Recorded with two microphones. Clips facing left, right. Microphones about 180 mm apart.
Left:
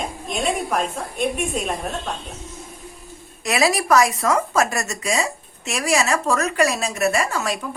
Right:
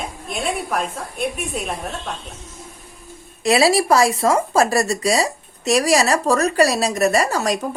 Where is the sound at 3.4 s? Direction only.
30° right (ahead or behind).